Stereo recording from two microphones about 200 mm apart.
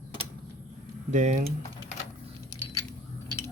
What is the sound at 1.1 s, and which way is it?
Speech, 35° right (ahead or behind).